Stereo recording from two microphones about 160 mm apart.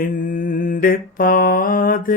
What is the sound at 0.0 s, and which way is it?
Mantra, 55° left (ahead or behind).